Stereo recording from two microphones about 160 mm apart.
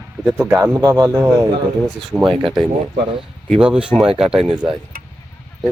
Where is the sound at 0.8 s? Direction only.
20° right (ahead or behind).